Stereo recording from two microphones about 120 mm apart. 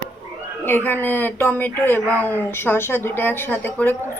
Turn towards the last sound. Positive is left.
turn(degrees=15)  # may be behind; listen again after turning